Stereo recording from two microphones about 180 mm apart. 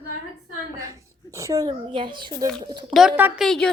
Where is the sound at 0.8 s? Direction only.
15° right (ahead or behind).